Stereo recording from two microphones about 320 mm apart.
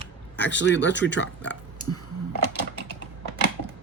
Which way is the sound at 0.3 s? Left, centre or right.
Left.